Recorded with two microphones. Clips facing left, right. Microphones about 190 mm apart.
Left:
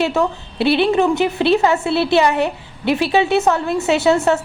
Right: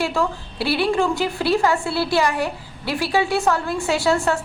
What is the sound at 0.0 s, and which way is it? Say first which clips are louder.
A woman's voice: left 4 dB; 20° left (ahead or behind).